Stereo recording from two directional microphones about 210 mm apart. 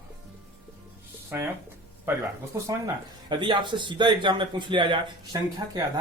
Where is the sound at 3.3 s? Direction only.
20° right (ahead or behind).